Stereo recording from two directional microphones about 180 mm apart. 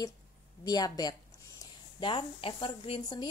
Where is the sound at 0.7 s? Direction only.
20° left (ahead or behind).